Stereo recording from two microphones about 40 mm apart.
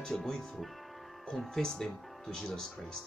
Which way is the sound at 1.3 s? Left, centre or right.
Centre.